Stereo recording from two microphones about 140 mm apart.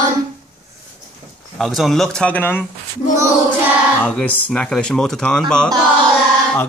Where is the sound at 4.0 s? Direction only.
10° left (ahead or behind).